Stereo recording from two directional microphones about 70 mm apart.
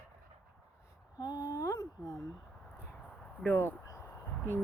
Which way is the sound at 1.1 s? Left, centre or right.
Left.